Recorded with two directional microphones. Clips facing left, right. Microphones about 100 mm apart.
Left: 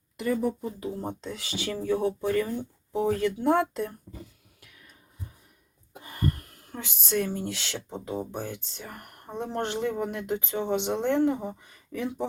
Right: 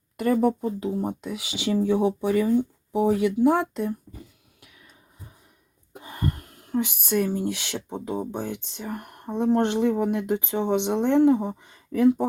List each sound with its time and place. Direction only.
0.2 s speech: 55° right (ahead or behind)
0.8 s speech: 20° right (ahead or behind)
3.3 s speech: 5° right (ahead or behind)
6.0 s speech: 20° right (ahead or behind)
11.9 s speech: 45° right (ahead or behind)